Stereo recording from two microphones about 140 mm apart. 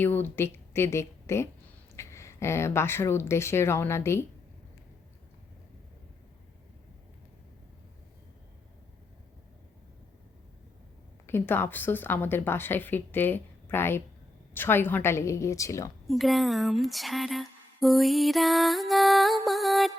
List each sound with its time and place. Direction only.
0.0 s speech: 15° left (ahead or behind)
11.3 s a woman's voice: 15° left (ahead or behind)
16.0 s a sound: centre (ahead or behind)